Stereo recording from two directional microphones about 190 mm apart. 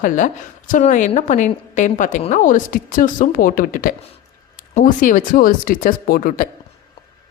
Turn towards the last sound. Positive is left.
turn(degrees=45)  # may be behind; listen again after turning